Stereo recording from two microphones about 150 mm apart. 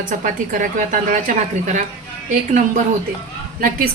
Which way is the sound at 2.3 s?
55° right (ahead or behind).